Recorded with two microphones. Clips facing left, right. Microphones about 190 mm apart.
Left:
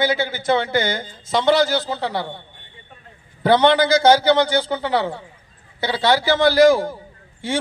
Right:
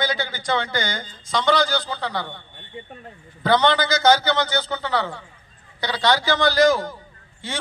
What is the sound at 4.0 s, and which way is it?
A man's voice, 30° left (ahead or behind).